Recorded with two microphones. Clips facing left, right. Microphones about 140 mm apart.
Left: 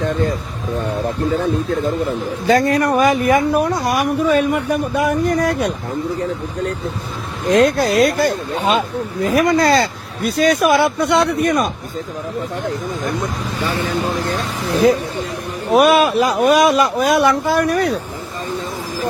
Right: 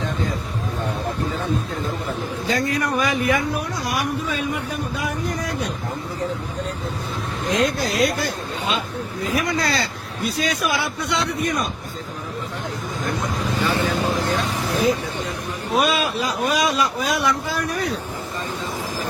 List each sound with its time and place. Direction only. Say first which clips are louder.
2.5 s speech: left 9 dB; 55° left (ahead or behind)
7.5 s speech: left 8 dB; 60° left (ahead or behind)
15.7 s speech: left 9 dB; 60° left (ahead or behind)